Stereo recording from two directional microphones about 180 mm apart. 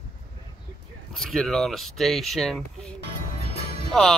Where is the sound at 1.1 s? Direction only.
Centre (ahead or behind).